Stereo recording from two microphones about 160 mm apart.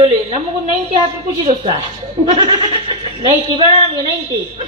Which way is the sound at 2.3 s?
30° right (ahead or behind).